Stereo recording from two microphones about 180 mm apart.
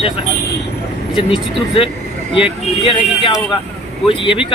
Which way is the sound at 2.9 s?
30° left (ahead or behind).